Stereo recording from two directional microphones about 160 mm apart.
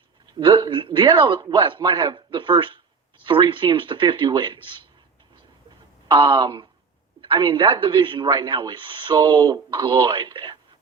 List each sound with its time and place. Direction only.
0.3 s a man's voice: 30° right (ahead or behind)
6.1 s a man's voice: 30° right (ahead or behind)